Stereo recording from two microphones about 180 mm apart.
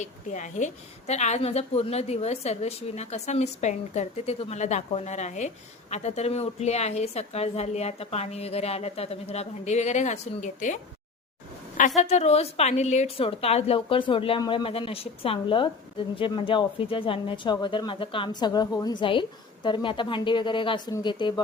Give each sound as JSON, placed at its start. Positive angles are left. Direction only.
{"t": 0.0, "sound": "a woman's voice", "side_deg": 45}
{"t": 11.8, "sound": "a woman's voice", "side_deg": 40}